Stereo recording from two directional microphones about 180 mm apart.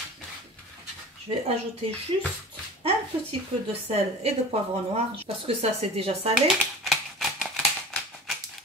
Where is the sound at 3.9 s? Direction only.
35° right (ahead or behind).